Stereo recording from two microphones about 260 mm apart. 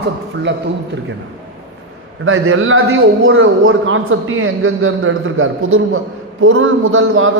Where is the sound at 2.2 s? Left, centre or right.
Right.